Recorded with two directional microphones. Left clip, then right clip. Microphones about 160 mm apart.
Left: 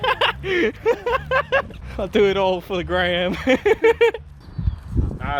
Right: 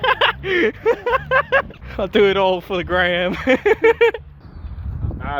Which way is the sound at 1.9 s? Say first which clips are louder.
Right 3 dB; 5° left (ahead or behind).